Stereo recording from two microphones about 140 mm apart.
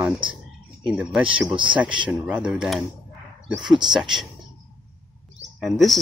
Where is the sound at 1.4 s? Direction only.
35° right (ahead or behind).